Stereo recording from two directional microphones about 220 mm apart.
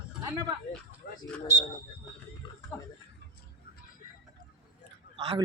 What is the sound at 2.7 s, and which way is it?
Speech, 10° left (ahead or behind).